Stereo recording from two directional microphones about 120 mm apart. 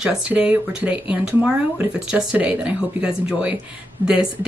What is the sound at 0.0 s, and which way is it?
Speech, 10° right (ahead or behind).